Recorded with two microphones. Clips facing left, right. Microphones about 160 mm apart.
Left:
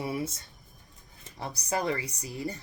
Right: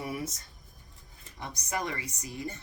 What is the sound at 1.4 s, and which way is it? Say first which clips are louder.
Speech: left 4 dB; 35° left (ahead or behind).